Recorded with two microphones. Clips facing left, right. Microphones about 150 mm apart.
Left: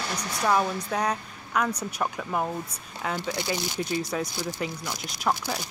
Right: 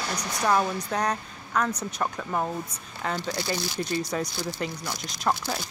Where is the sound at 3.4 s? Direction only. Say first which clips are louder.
Even; 15° left (ahead or behind).